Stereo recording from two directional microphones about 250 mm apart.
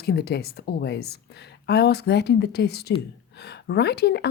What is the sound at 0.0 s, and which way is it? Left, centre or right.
Speech, left.